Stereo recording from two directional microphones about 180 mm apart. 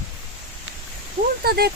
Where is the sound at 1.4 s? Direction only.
60° right (ahead or behind).